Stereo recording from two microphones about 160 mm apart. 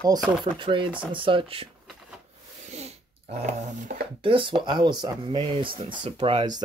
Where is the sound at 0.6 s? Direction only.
30° right (ahead or behind).